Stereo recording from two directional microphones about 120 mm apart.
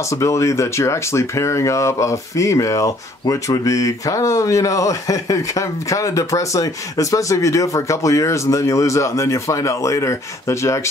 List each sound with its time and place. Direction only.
0.1 s speech: 25° left (ahead or behind)